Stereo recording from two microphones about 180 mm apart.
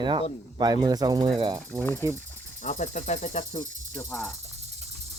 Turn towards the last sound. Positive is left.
turn(degrees=15)  # may be behind; listen again after turning